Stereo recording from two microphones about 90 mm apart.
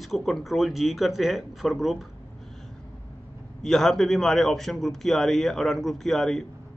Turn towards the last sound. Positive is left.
turn(degrees=5)  # may be behind; listen again after turning